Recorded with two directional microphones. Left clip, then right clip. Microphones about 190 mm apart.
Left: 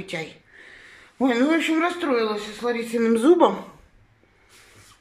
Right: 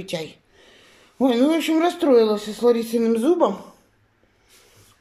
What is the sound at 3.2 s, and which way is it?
Speech, centre (ahead or behind).